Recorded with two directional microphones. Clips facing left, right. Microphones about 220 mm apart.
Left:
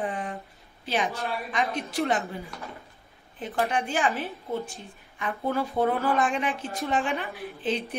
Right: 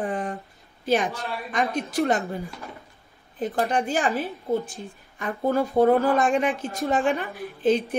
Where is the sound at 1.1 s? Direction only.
Centre (ahead or behind).